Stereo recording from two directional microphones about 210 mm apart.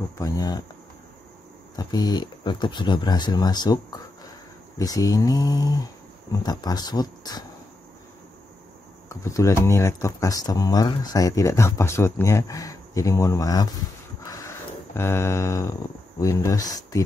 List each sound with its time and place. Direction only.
0.2 s speech: 15° left (ahead or behind)
1.8 s speech: 20° left (ahead or behind)
9.1 s speech: 15° left (ahead or behind)
14.2 s a sound: 15° left (ahead or behind)
16.2 s speech: 15° left (ahead or behind)